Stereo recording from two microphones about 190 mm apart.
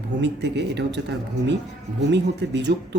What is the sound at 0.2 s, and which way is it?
Speech, 65° right (ahead or behind).